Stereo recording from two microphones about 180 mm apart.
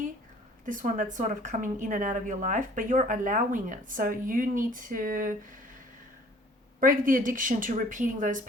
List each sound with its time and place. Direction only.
0.6 s a woman's voice: 45° right (ahead or behind)
6.7 s a woman's voice: 50° right (ahead or behind)